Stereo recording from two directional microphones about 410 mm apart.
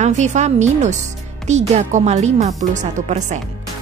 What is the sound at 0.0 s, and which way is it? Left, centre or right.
Speech, centre.